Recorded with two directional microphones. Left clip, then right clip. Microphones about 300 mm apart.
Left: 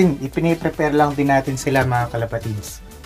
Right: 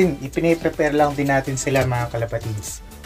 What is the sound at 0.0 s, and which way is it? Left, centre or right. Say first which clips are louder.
Speech: even; centre.